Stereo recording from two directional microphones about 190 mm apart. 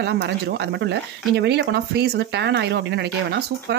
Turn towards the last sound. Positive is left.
turn(degrees=-65)  # may be behind; listen again after turning